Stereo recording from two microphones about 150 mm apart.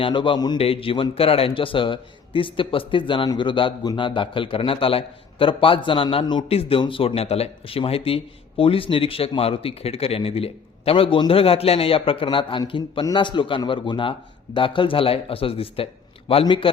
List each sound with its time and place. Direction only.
0.0 s a man's voice: 35° left (ahead or behind)